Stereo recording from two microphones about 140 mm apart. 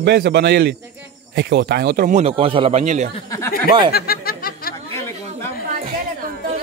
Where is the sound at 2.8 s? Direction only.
55° right (ahead or behind).